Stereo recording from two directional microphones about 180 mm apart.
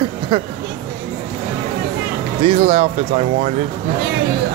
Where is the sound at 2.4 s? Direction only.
35° right (ahead or behind).